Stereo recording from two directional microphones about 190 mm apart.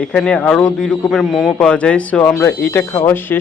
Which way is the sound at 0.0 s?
5° left (ahead or behind).